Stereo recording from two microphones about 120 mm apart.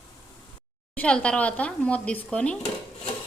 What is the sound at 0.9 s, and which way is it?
Speech, 10° left (ahead or behind).